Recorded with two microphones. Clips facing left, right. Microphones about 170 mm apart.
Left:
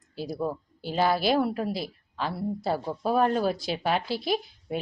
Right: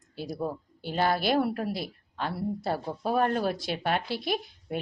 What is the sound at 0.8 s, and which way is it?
Speech, 50° right (ahead or behind).